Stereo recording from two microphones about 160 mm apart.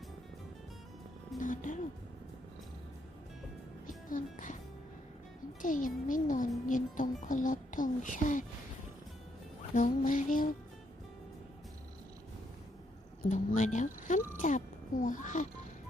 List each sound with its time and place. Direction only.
1.4 s music: 55° left (ahead or behind)
3.8 s music: 55° left (ahead or behind)
5.6 s a child's voice: 55° left (ahead or behind)
9.7 s a child's voice: 55° left (ahead or behind)
13.2 s speech: 50° left (ahead or behind)